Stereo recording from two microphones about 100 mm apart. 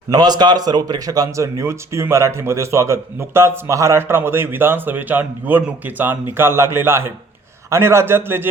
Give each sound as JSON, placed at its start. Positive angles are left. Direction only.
{"t": 0.1, "sound": "a man's voice", "side_deg": -45}